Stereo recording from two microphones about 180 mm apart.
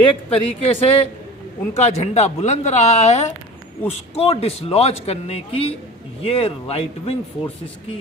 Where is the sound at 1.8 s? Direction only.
35° left (ahead or behind).